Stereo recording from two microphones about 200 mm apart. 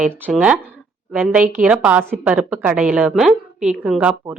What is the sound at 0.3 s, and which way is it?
A woman's voice, 5° right (ahead or behind).